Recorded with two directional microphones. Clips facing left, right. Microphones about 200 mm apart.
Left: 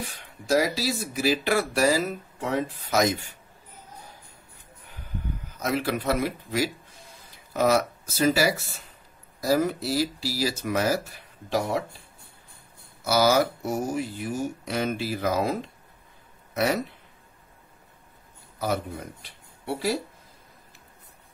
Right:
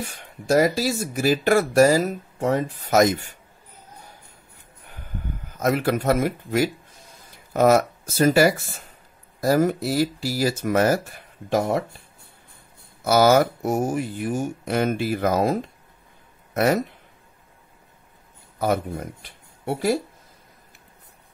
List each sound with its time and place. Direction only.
0.0 s speech: 50° right (ahead or behind)
5.5 s speech: 50° right (ahead or behind)
13.0 s speech: 55° right (ahead or behind)
16.5 s speech: 50° right (ahead or behind)
18.6 s speech: 50° right (ahead or behind)